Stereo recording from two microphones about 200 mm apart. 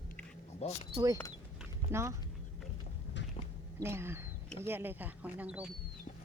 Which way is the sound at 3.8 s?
10° right (ahead or behind).